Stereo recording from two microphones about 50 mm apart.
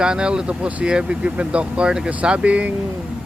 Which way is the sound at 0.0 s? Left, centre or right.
Centre.